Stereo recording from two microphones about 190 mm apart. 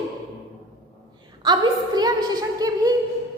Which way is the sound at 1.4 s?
20° right (ahead or behind).